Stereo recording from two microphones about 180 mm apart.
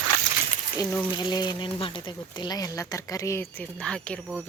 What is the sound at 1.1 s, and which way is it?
Speech, 25° left (ahead or behind).